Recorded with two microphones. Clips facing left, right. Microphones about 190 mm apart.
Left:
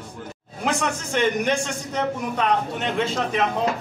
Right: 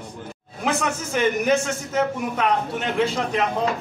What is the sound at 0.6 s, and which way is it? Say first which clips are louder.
A man's voice: right 1 dB; centre (ahead or behind).